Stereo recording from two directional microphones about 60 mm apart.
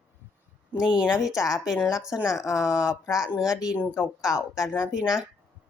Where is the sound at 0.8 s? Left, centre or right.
Centre.